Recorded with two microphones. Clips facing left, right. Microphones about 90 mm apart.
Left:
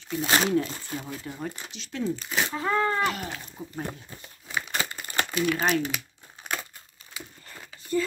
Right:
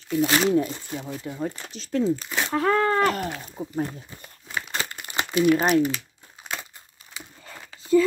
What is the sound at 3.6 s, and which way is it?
Speech, 25° right (ahead or behind).